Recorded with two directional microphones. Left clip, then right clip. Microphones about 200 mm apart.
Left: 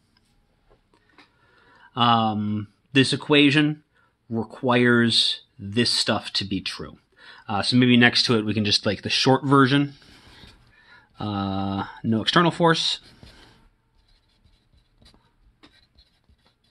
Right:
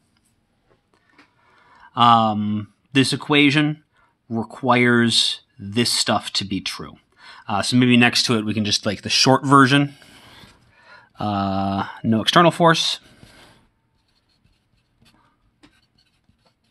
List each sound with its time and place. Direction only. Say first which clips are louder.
0.9 s speech: right 1 dB; 25° right (ahead or behind)